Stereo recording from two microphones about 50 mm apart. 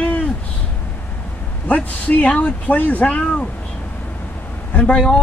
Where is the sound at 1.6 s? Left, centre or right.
Left.